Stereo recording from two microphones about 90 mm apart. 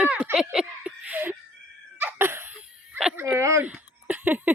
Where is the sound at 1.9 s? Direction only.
25° right (ahead or behind).